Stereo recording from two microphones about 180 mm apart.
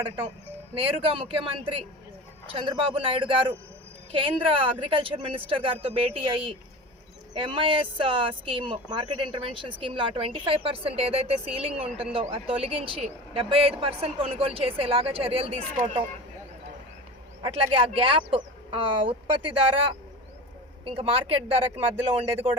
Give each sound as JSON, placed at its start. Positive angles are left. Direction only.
{"t": 0.8, "sound": "speech", "side_deg": -30}
{"t": 17.4, "sound": "speech", "side_deg": -30}